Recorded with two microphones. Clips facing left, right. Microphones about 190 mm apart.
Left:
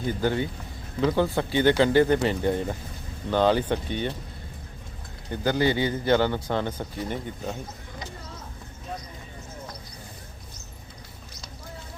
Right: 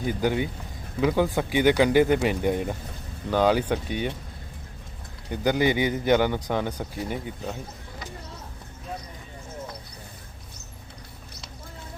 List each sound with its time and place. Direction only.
0.0 s speech: 10° right (ahead or behind)
5.3 s speech: 15° right (ahead or behind)